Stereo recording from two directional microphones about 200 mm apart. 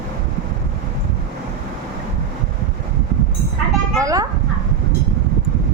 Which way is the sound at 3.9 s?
15° right (ahead or behind).